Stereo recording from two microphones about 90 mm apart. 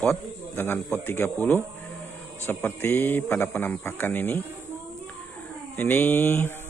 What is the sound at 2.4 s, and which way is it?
Speech, 25° left (ahead or behind).